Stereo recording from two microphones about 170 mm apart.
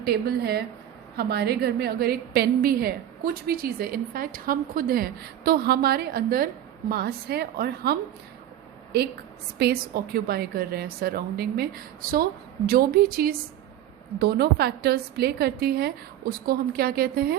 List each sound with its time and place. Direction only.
0.0 s a woman's voice: 65° right (ahead or behind)
9.6 s a woman's voice: 70° right (ahead or behind)